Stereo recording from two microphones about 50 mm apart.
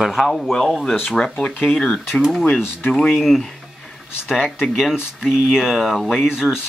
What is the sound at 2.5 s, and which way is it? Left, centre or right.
Speech, centre.